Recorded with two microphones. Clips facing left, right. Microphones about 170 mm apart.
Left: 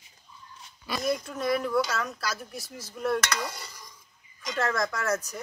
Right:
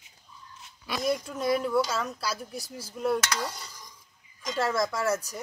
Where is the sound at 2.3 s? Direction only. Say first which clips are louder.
Right 1 dB; 30° right (ahead or behind).